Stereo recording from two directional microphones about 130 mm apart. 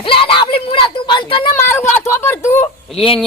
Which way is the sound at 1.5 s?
20° left (ahead or behind).